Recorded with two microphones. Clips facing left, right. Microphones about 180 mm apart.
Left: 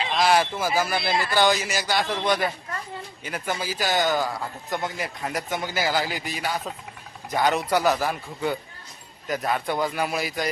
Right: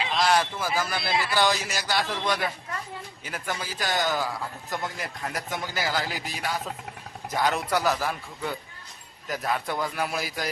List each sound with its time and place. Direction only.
0.0 s speech: centre (ahead or behind)